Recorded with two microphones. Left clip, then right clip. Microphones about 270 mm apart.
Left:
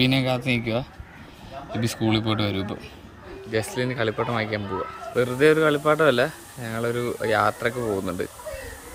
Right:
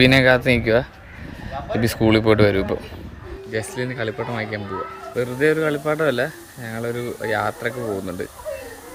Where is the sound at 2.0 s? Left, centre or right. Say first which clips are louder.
Right 9 dB; right.